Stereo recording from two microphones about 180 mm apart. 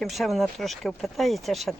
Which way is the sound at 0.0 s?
Centre (ahead or behind).